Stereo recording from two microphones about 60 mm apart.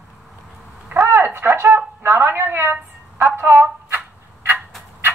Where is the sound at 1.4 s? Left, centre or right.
Right.